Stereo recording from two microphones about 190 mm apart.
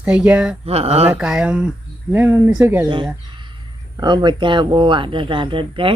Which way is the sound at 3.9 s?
25° right (ahead or behind).